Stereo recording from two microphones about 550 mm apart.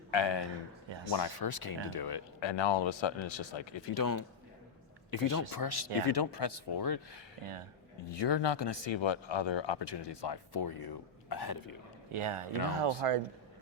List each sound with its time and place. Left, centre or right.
0.1 s speech: left
0.9 s a man's voice: right
1.1 s speech: left
3.9 s speech: left
7.4 s speech: right
8.1 s speech: left
12.1 s speech: right